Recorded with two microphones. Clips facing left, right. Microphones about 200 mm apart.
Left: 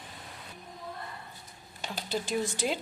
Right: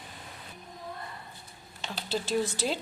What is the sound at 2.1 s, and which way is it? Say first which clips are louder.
Speech: right 2 dB; 15° left (ahead or behind).